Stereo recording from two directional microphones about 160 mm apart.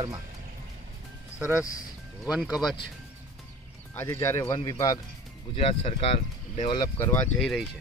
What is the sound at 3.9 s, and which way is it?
Speech, 15° left (ahead or behind).